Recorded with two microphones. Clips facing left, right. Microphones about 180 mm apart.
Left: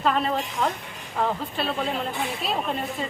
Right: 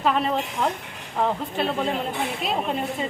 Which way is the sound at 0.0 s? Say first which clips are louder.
Right 1 dB; 15° right (ahead or behind).